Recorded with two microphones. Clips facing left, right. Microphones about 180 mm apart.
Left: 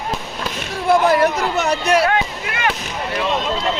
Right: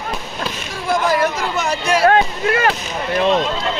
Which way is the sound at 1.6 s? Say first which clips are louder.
Left 2 dB; 65° left (ahead or behind).